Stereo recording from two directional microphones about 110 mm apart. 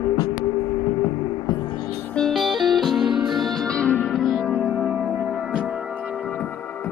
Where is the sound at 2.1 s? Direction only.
Centre (ahead or behind).